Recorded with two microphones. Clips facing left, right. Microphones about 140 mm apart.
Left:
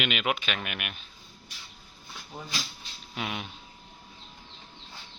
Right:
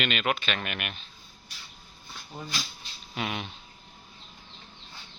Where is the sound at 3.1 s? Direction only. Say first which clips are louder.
Right 2 dB; centre (ahead or behind).